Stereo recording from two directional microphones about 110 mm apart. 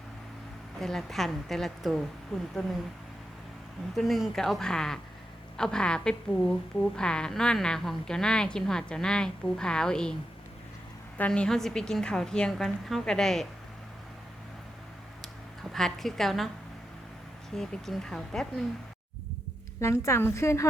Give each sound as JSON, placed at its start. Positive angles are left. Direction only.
{"t": 0.8, "sound": "a woman's voice", "side_deg": 5}
{"t": 3.9, "sound": "a woman's voice", "side_deg": 0}
{"t": 11.2, "sound": "a woman's voice", "side_deg": 10}
{"t": 15.2, "sound": "a sound", "side_deg": 5}
{"t": 17.5, "sound": "a woman's voice", "side_deg": 5}
{"t": 20.1, "sound": "a woman's voice", "side_deg": 25}